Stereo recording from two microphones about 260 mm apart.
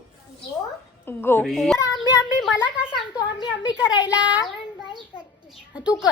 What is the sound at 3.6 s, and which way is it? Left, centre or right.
Speech, centre.